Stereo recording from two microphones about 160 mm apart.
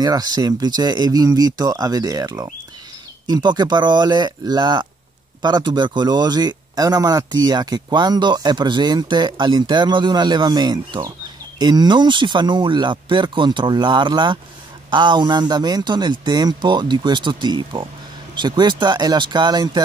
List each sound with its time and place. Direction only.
0.0 s speech: 25° right (ahead or behind)